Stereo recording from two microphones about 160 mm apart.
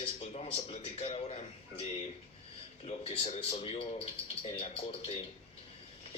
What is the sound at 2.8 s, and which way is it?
A man's voice, 40° left (ahead or behind).